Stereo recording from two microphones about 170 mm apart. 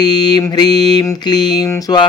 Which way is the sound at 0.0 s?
25° left (ahead or behind).